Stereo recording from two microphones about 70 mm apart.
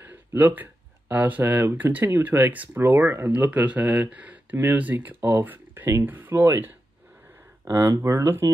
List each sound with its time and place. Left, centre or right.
0.0 s speech: right
2.8 s speech: right
3.3 s speech: right
7.6 s speech: right
7.9 s speech: right